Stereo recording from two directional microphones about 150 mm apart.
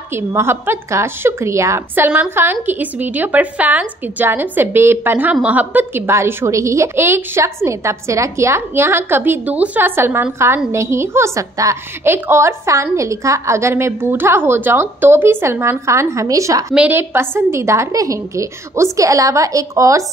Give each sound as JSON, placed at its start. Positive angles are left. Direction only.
{"t": 0.1, "sound": "a woman's voice", "side_deg": -15}
{"t": 16.7, "sound": "a woman's voice", "side_deg": -10}